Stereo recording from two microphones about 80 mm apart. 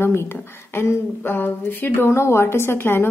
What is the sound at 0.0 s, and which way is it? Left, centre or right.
Speech, left.